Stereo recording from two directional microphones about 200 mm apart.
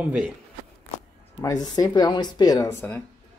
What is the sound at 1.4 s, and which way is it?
Speech, 20° left (ahead or behind).